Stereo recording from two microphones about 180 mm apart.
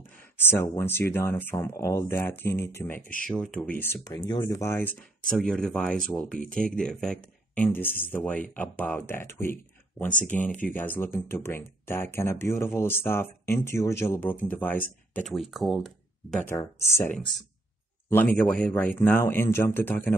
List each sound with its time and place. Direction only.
0.4 s speech: 15° left (ahead or behind)
16.4 s speech: 15° left (ahead or behind)